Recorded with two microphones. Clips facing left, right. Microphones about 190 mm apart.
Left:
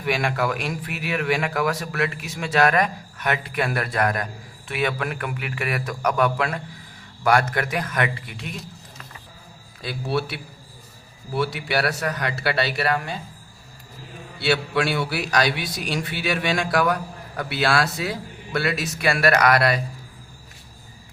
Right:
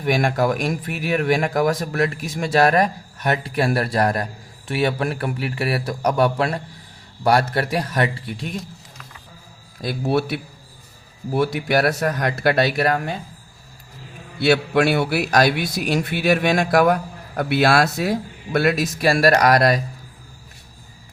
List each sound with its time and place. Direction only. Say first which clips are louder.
0.0 s a man's voice: right 4 dB; 40° right (ahead or behind)
9.8 s a man's voice: right 5 dB; 50° right (ahead or behind)
14.4 s a man's voice: right 5 dB; 45° right (ahead or behind)
19.0 s a man's voice: right 3 dB; 35° right (ahead or behind)